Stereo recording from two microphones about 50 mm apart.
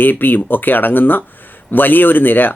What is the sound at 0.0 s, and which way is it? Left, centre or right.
Speech, left.